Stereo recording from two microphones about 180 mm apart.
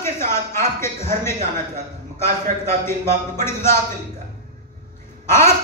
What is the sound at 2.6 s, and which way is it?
Speech, 15° left (ahead or behind).